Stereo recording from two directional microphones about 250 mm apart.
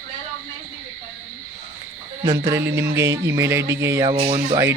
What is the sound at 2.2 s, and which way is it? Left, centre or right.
Speech, centre.